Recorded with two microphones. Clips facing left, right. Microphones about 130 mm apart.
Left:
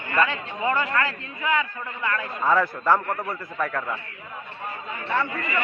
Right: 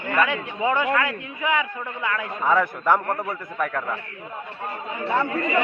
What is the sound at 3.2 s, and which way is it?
Speech, centre (ahead or behind).